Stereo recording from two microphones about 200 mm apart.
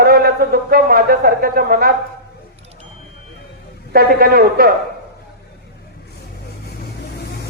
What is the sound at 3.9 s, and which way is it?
Speech, 50° right (ahead or behind).